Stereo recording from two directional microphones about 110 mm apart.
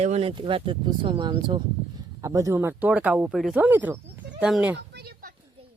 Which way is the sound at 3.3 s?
5° right (ahead or behind).